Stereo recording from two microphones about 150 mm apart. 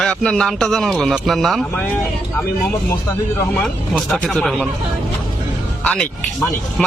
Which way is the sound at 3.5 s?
Centre (ahead or behind).